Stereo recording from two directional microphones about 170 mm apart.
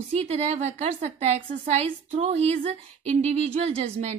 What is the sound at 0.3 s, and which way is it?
A woman's voice, 40° right (ahead or behind).